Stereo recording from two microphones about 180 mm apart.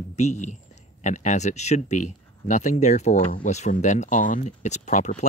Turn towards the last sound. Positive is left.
turn(degrees=40)  # may be behind; listen again after turning